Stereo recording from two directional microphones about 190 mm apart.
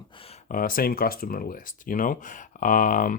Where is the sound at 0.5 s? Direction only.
50° left (ahead or behind).